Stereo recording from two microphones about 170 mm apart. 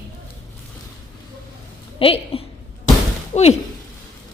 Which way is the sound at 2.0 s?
35° left (ahead or behind).